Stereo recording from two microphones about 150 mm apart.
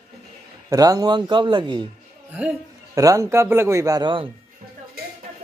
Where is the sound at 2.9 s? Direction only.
20° right (ahead or behind).